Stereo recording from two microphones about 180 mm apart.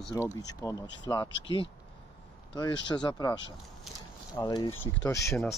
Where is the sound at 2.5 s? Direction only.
25° left (ahead or behind).